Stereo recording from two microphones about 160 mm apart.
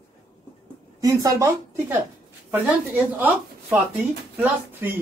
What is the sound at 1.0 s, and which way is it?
A woman's voice, 20° right (ahead or behind).